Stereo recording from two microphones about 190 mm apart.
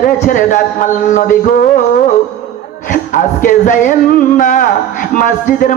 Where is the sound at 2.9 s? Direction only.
45° left (ahead or behind).